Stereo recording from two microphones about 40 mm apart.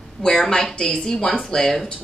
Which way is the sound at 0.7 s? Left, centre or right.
Left.